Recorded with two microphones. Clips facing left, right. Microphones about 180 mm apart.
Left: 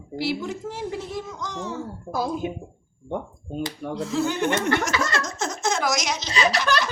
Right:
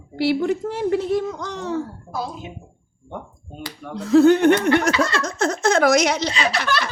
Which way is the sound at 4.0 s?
60° right (ahead or behind).